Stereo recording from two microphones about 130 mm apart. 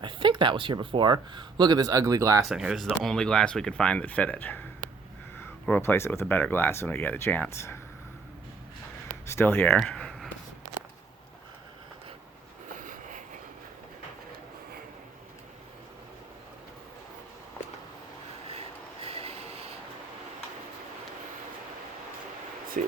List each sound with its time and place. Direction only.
0.0 s speech: 40° right (ahead or behind)
2.4 s speech: 5° right (ahead or behind); by 4.6 s 15° left (ahead or behind)
5.6 s speech: 15° left (ahead or behind)
9.2 s speech: 20° left (ahead or behind)
9.8 s a sound: 5° left (ahead or behind)
12.7 s vehicle: 90° right
19.0 s vehicle: 50° right (ahead or behind)
22.8 s a sound: 85° right